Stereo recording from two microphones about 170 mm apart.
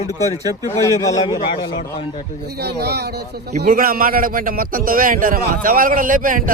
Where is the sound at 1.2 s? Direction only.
30° left (ahead or behind).